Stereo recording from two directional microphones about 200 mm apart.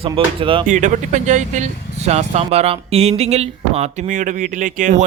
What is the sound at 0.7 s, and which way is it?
Speech, 40° right (ahead or behind).